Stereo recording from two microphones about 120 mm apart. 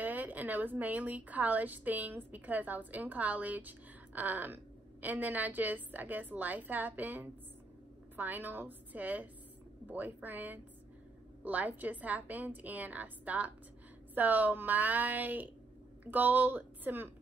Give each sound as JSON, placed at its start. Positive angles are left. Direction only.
{"t": 0.0, "sound": "a woman's voice", "side_deg": -15}